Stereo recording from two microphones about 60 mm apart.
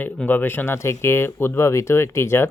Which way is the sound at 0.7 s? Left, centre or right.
Left.